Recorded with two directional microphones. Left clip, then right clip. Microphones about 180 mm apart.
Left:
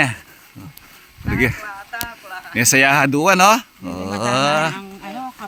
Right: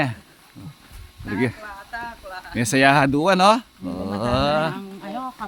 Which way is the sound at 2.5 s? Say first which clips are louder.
Left 3 dB; 20° left (ahead or behind).